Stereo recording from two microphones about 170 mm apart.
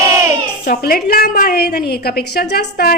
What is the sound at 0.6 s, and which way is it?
A woman's voice, 60° left (ahead or behind).